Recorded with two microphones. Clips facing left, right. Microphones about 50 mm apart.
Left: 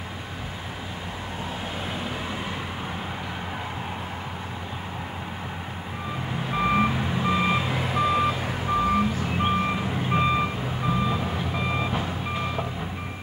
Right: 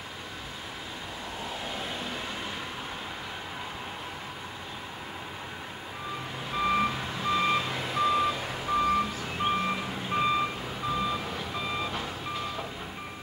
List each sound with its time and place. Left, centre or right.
6.5 s reversing beeps: left